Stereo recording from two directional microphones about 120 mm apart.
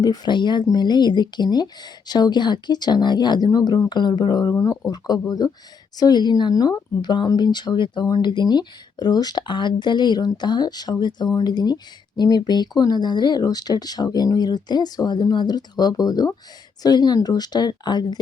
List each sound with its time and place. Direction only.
0.0 s speech: 35° left (ahead or behind)
4.5 s speech: 25° left (ahead or behind)